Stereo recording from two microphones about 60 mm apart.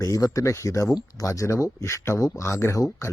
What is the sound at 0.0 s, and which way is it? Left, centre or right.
Speech, left.